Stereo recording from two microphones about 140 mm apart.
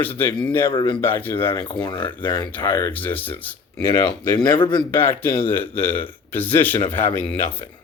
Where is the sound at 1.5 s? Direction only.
35° left (ahead or behind).